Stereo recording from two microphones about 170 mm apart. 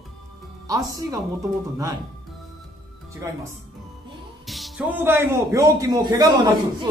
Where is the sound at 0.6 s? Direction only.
20° right (ahead or behind).